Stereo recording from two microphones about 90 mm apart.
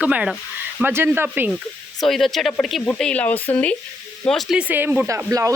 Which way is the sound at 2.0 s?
5° left (ahead or behind).